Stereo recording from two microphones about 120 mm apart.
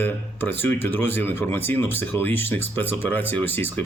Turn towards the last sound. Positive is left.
turn(degrees=15)  # may be behind; listen again after turning